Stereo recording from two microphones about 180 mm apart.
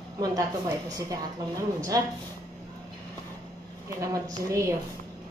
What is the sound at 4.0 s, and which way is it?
Speech, 15° right (ahead or behind).